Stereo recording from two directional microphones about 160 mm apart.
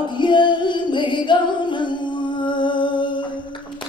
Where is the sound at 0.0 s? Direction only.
30° left (ahead or behind).